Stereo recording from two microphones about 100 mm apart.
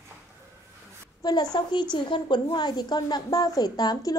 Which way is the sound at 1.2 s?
40° left (ahead or behind).